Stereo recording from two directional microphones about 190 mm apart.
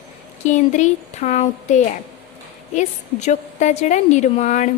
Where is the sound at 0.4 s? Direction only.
40° left (ahead or behind).